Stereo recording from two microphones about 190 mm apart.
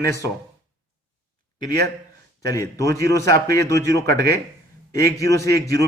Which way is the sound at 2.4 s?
15° left (ahead or behind).